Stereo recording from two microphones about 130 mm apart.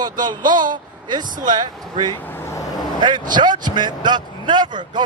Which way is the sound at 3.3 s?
35° right (ahead or behind).